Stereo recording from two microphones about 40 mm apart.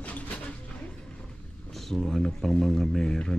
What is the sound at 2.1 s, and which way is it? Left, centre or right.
A man's voice, centre.